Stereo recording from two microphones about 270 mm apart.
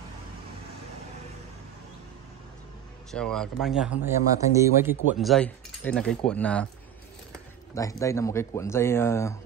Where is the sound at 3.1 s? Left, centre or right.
Centre.